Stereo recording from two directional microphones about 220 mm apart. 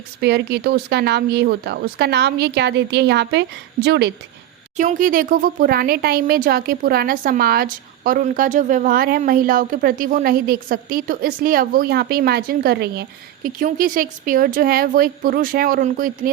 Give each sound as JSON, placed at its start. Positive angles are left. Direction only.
{"t": 0.2, "sound": "speech", "side_deg": -50}
{"t": 4.8, "sound": "speech", "side_deg": -35}